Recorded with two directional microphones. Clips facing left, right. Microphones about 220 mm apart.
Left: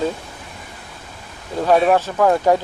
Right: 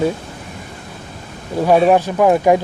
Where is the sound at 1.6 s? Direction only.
15° right (ahead or behind).